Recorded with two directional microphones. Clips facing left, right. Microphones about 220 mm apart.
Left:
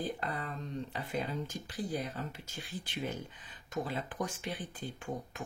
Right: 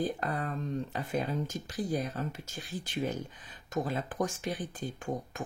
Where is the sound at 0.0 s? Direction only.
45° right (ahead or behind).